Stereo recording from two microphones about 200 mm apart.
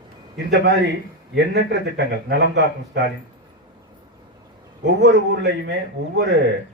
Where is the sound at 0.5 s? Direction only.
55° right (ahead or behind).